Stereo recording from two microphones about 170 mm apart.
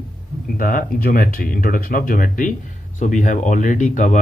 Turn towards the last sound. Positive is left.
turn(degrees=45)  # may be behind; listen again after turning